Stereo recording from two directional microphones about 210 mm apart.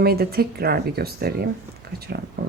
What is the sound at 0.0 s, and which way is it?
Speech, 45° right (ahead or behind).